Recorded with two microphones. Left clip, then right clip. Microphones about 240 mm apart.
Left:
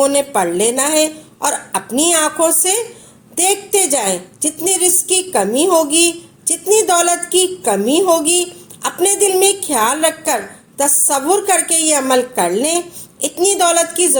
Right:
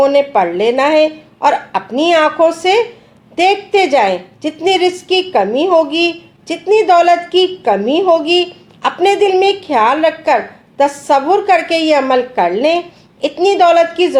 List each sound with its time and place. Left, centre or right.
0.0 s a woman's voice: left